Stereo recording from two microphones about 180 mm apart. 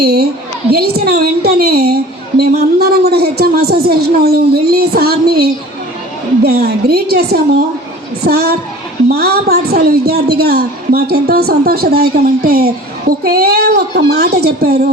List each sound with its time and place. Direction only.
0.0 s a woman's voice: 65° right (ahead or behind)